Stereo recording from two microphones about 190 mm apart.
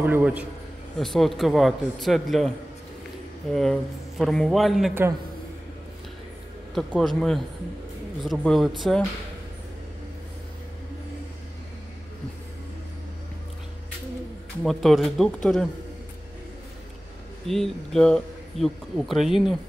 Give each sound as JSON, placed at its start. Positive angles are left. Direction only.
{"t": 0.0, "sound": "a man's voice", "side_deg": -10}
{"t": 3.5, "sound": "a man's voice", "side_deg": 0}
{"t": 6.7, "sound": "a man's voice", "side_deg": 0}
{"t": 14.6, "sound": "a man's voice", "side_deg": 0}
{"t": 17.5, "sound": "a man's voice", "side_deg": 0}